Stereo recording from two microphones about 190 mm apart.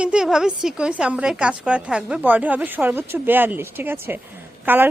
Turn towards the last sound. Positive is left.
turn(degrees=-10)  # may be behind; listen again after turning